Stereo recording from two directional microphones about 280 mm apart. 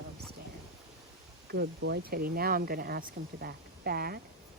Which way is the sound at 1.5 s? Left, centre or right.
Right.